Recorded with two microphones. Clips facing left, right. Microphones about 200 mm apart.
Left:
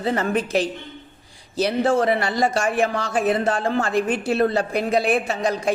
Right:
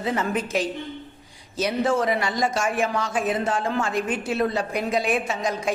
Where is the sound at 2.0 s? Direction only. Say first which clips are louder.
Left 3 dB; 60° left (ahead or behind).